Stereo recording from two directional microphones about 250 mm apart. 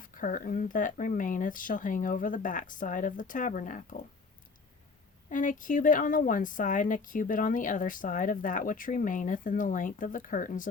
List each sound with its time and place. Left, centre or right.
0.0 s speech: left
5.3 s speech: left